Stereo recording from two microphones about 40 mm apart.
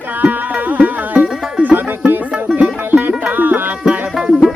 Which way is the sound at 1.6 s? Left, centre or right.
Right.